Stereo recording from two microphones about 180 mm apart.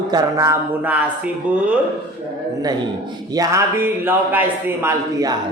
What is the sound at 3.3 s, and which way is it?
A man's voice, 20° right (ahead or behind).